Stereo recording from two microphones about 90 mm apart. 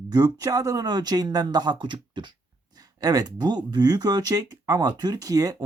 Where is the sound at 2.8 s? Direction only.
45° right (ahead or behind).